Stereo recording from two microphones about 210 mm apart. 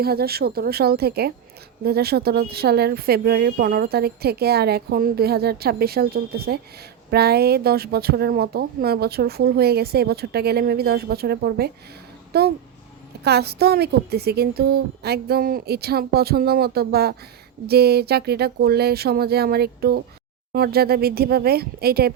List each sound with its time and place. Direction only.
0.0 s speech: 50° right (ahead or behind)